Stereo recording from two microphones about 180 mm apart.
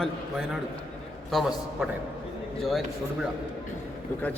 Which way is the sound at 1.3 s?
Centre (ahead or behind).